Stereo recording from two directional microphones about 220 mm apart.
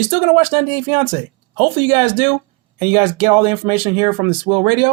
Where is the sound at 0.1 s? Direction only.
25° right (ahead or behind).